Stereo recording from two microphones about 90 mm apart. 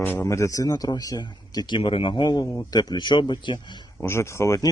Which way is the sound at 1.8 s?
80° left.